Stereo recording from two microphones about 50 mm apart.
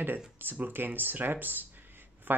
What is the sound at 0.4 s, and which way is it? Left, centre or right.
Speech, right.